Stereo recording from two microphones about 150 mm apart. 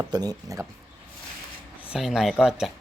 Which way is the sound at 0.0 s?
25° right (ahead or behind).